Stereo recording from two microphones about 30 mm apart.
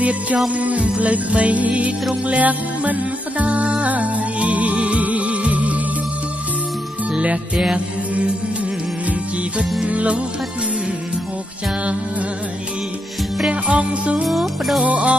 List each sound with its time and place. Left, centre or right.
0.5 s music: right
9.8 s music: right
13.5 s music: right
14.2 s music: centre
14.8 s music: right